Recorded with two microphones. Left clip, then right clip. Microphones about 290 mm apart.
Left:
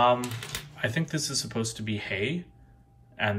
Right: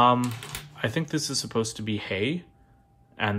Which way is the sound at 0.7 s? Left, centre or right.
Centre.